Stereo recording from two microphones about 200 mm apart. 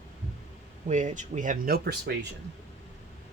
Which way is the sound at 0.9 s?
40° right (ahead or behind).